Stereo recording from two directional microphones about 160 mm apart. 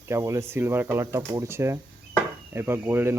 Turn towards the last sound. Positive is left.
turn(degrees=-15)  # may be behind; listen again after turning